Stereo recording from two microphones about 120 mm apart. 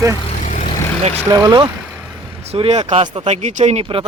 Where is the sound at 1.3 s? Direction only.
30° right (ahead or behind).